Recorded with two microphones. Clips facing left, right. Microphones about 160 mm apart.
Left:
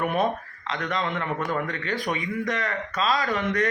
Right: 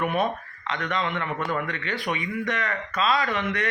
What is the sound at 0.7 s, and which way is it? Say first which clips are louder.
Speech: even; 35° left (ahead or behind).